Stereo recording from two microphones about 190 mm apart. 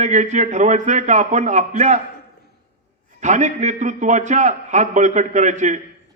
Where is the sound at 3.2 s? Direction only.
40° right (ahead or behind).